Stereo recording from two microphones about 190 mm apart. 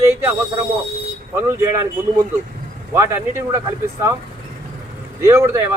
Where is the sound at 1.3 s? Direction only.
15° right (ahead or behind).